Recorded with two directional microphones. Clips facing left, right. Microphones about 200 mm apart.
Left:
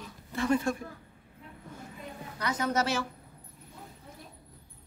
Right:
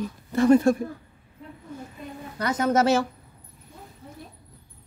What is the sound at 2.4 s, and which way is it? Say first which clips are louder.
Speech: right 8 dB; 45° right (ahead or behind).